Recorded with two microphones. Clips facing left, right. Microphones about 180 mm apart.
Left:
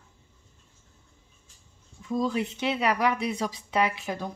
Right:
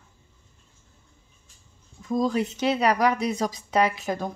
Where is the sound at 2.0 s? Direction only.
40° right (ahead or behind).